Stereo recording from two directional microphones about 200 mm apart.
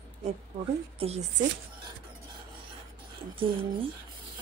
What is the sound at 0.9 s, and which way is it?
Speech, 30° right (ahead or behind).